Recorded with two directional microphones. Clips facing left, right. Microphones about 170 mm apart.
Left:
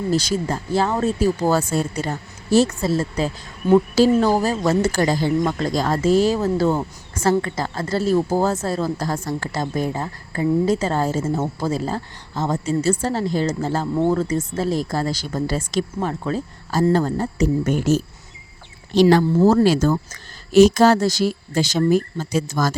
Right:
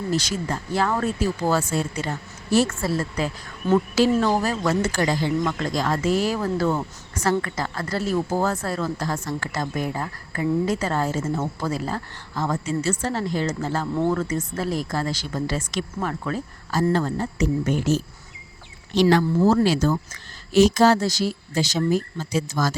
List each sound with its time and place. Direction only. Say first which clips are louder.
0.1 s speech: left 4 dB; 35° left (ahead or behind)
1.2 s speech: left 4 dB; 35° left (ahead or behind)
2.6 s speech: left 4 dB; 25° left (ahead or behind); by 18.0 s 50° left (ahead or behind)
19.5 s speech: left 3 dB; 45° left (ahead or behind)